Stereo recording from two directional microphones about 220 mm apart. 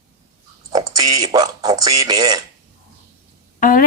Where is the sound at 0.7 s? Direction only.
15° right (ahead or behind).